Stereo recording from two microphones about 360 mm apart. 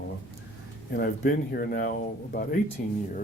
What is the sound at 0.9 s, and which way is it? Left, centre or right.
Speech, left.